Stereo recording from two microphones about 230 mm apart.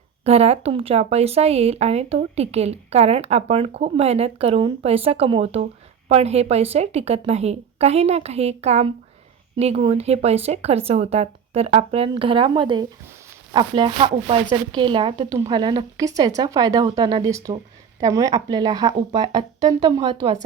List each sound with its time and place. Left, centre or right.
0.3 s a woman's voice: right